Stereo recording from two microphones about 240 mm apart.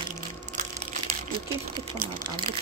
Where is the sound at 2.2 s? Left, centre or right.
Centre.